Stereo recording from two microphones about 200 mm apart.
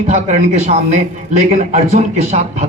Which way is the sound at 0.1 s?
35° right (ahead or behind).